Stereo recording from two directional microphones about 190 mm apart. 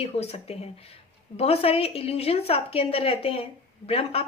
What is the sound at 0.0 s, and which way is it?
A woman's voice, 35° left (ahead or behind).